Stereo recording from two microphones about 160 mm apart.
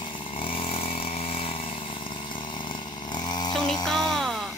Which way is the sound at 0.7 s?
40° left (ahead or behind).